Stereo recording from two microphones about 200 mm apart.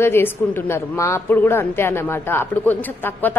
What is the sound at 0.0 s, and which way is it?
Speech, 10° left (ahead or behind).